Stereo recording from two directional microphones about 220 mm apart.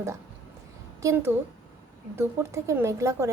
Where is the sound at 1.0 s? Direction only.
10° right (ahead or behind).